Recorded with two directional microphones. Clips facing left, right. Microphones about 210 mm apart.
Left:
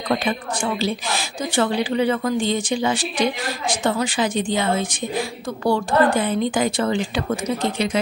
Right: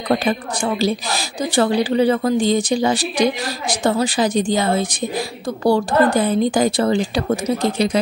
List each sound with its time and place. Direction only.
0.1 s a woman's voice: 40° right (ahead or behind)